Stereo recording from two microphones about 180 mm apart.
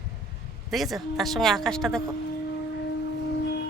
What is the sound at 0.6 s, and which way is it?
A woman's voice, centre (ahead or behind).